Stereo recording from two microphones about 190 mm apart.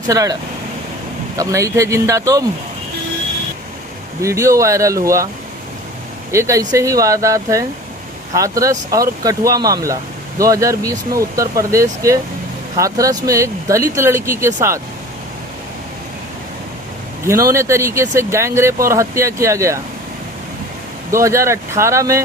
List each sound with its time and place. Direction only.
0.1 s speech: 20° right (ahead or behind)
1.4 s speech: 15° right (ahead or behind)
4.2 s speech: 15° right (ahead or behind)
6.3 s speech: 15° right (ahead or behind)
17.2 s speech: 15° right (ahead or behind)
21.1 s speech: 15° right (ahead or behind)